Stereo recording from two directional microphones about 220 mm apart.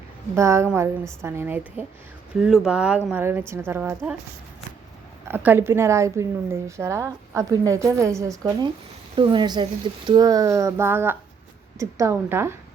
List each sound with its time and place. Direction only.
0.3 s a woman's voice: 10° right (ahead or behind)
5.3 s a woman's voice: 10° right (ahead or behind)